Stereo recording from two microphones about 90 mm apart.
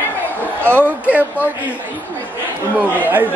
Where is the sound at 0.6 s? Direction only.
20° right (ahead or behind).